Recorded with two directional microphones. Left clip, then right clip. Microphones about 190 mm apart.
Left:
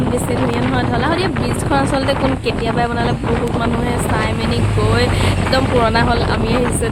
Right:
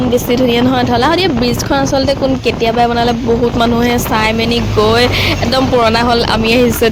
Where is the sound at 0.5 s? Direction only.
40° right (ahead or behind).